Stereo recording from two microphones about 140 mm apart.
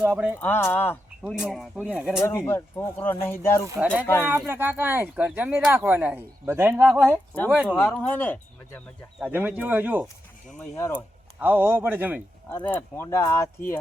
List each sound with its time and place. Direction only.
0.0 s speech: 10° right (ahead or behind)
0.3 s speech: 15° left (ahead or behind)
1.3 s speech: centre (ahead or behind)
2.2 s speech: 20° left (ahead or behind)
4.2 s speech: 15° right (ahead or behind)
7.9 s speech: 10° left (ahead or behind)
9.2 s speech: 15° right (ahead or behind)
10.8 s speech: 20° left (ahead or behind)
11.3 s speech: 10° right (ahead or behind)
12.6 s speech: 15° left (ahead or behind)